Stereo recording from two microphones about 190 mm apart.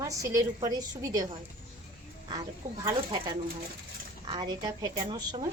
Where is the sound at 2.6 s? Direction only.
35° right (ahead or behind).